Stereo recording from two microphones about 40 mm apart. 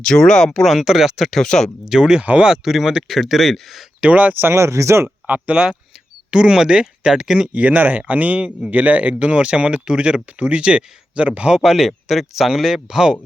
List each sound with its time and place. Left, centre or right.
0.0 s speech: centre
0.6 s speech: centre
1.5 s speech: centre
1.8 s speech: centre
2.4 s speech: centre
4.1 s speech: right
4.4 s speech: right
5.0 s speech: right
6.3 s speech: centre
7.5 s speech: right
11.6 s speech: centre